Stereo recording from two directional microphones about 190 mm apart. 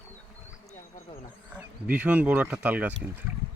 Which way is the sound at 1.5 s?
5° right (ahead or behind).